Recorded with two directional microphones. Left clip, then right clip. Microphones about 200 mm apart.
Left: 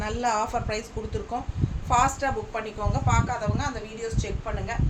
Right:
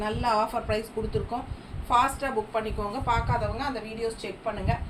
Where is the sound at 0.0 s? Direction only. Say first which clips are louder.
Even; 20° left (ahead or behind).